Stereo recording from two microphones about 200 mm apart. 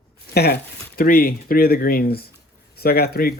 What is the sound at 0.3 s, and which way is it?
Speech, 50° left (ahead or behind).